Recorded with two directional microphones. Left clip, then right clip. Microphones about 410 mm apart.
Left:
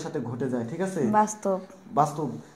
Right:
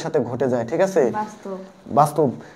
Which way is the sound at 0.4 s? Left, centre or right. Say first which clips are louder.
Right 10 dB; right.